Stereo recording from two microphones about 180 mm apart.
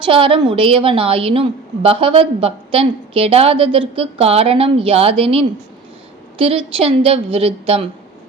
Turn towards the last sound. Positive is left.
turn(degrees=-35)  # may be behind; listen again after turning